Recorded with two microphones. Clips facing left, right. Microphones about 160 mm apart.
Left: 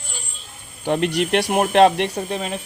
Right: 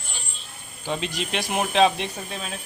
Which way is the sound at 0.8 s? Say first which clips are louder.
Left 9 dB; 60° left (ahead or behind).